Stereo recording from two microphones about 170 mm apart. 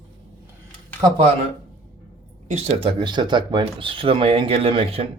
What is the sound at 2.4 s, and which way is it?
Speech, 40° right (ahead or behind).